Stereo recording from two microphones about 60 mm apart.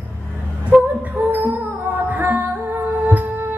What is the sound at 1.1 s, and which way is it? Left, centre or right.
Music, right.